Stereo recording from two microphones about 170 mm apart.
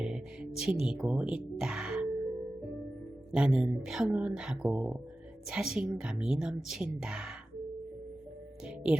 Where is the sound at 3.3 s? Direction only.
5° right (ahead or behind).